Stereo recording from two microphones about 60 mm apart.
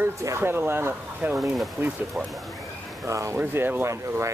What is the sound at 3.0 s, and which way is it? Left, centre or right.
Speech, right.